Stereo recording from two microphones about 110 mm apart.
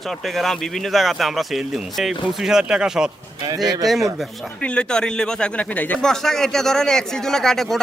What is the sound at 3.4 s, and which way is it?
Speech, 35° right (ahead or behind).